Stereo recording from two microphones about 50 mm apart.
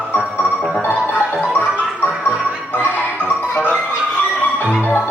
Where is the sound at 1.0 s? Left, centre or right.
Left.